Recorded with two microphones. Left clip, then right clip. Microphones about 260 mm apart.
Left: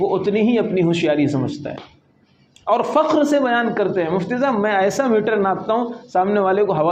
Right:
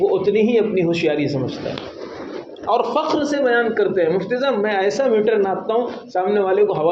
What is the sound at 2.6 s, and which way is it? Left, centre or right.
A man's voice, left.